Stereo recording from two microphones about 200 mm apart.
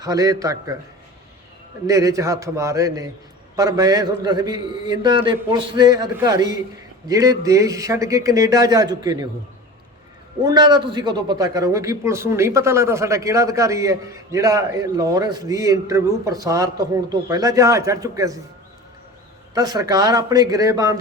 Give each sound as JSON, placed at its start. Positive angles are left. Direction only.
{"t": 0.0, "sound": "a man's voice", "side_deg": -15}
{"t": 1.9, "sound": "a man's voice", "side_deg": -15}
{"t": 10.4, "sound": "a man's voice", "side_deg": -20}
{"t": 19.5, "sound": "a man's voice", "side_deg": -20}